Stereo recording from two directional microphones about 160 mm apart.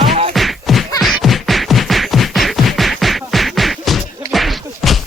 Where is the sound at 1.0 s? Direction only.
Centre (ahead or behind).